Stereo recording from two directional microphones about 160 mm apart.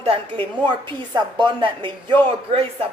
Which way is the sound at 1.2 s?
30° right (ahead or behind).